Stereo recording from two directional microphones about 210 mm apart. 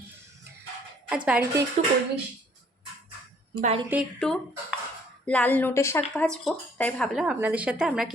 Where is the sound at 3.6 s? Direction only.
30° right (ahead or behind).